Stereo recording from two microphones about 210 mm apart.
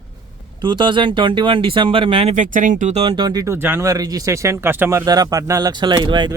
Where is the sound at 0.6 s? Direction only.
20° right (ahead or behind).